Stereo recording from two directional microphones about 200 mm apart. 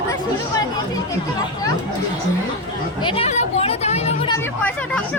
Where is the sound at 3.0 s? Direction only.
25° left (ahead or behind).